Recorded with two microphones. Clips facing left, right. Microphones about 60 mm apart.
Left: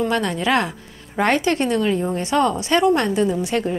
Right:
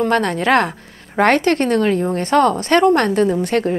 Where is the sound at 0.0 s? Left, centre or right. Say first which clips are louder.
Right 4 dB; right.